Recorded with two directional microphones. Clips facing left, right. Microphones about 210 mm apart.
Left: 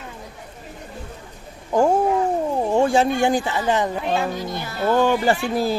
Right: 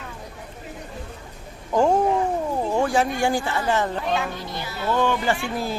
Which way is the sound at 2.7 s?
25° left (ahead or behind).